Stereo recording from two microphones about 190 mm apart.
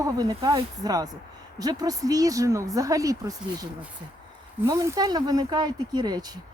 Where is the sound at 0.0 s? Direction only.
20° right (ahead or behind).